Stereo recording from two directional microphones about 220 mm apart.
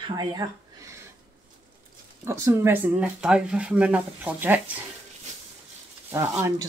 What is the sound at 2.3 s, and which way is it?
Speech, 10° right (ahead or behind).